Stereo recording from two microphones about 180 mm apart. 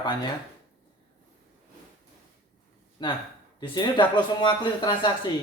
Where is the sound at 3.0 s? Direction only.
25° left (ahead or behind).